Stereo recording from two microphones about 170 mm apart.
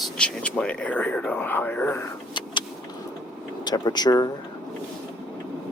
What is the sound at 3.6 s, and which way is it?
Speech, 25° left (ahead or behind).